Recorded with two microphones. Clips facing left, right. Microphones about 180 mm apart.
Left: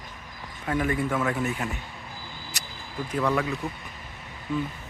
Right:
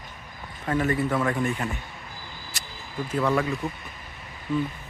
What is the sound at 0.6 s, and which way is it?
Speech, 10° left (ahead or behind).